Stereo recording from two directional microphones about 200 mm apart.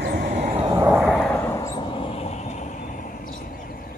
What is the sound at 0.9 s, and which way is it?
Vehicle, 5° right (ahead or behind).